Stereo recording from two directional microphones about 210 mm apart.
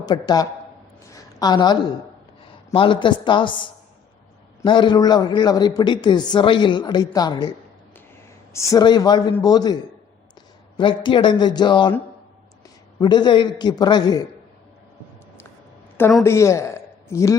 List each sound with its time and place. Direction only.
0.0 s speech: 20° left (ahead or behind)
1.1 s a sound: 20° left (ahead or behind)
2.6 s speech: 25° left (ahead or behind)
8.5 s a man's voice: 15° left (ahead or behind)
10.8 s speech: 25° left (ahead or behind)
13.0 s speech: 20° left (ahead or behind)
16.2 s a man's voice: 15° left (ahead or behind)